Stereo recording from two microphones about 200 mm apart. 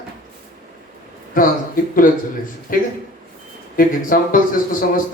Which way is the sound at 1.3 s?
45° left (ahead or behind).